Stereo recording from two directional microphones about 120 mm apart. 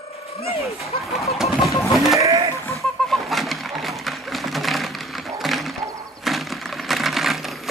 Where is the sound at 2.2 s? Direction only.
25° right (ahead or behind).